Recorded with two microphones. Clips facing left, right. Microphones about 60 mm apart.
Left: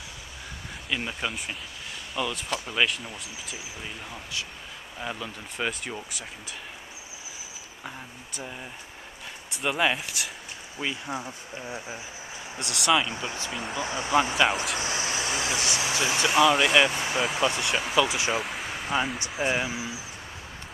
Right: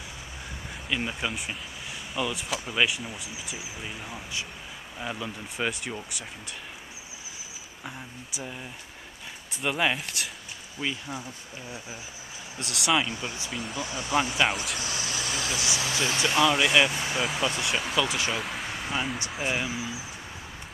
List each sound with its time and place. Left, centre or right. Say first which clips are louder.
0.8 s speech: right 1 dB; centre
7.8 s speech: even; centre
9.5 s speech: left 1 dB; centre
11.1 s speech: left 3 dB; left
12.5 s speech: left 2 dB; centre
13.1 s speech: left 1 dB; left
13.5 s speech: left 2 dB; centre
13.7 s speech: left 3 dB; left
14.4 s speech: left 2 dB; centre
14.8 s vehicle: left 3 dB; left
15.8 s speech: left 1 dB; centre
16.2 s speech: left 3 dB; centre